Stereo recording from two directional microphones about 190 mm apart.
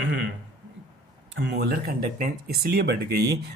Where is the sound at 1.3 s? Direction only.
65° right (ahead or behind).